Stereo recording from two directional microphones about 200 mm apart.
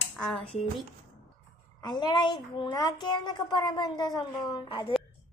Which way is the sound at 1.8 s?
20° left (ahead or behind).